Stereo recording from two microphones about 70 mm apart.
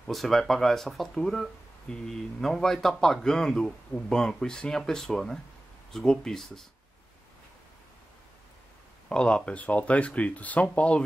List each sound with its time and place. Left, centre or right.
0.0 s speech: centre
9.1 s speech: centre